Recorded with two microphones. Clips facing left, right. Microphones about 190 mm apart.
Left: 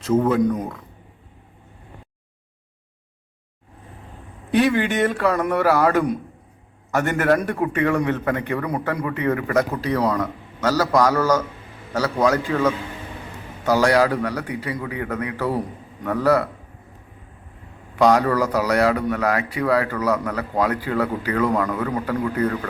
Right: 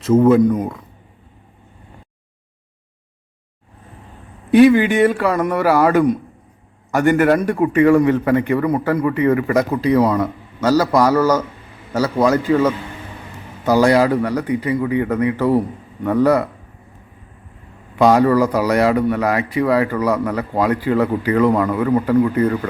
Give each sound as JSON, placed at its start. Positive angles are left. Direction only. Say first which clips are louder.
{"t": 0.0, "sound": "a man's voice", "louder": "right 6 dB", "side_deg": -5}
{"t": 4.6, "sound": "a man's voice", "louder": "right 9 dB", "side_deg": -5}
{"t": 18.0, "sound": "a man's voice", "louder": "right 4 dB", "side_deg": -10}